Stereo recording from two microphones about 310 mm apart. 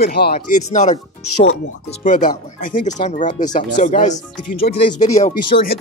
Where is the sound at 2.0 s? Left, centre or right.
Left.